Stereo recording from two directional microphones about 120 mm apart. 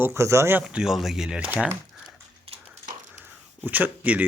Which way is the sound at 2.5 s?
55° right (ahead or behind).